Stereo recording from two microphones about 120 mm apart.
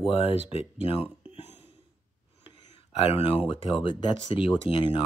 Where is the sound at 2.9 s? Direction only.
55° left (ahead or behind).